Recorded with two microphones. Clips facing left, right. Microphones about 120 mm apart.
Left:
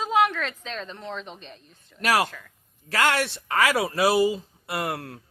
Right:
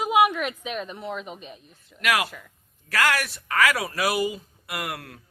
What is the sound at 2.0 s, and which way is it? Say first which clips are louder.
Speech: left 2 dB; 35° left (ahead or behind).